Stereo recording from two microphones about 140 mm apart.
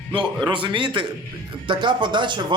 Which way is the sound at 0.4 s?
35° right (ahead or behind).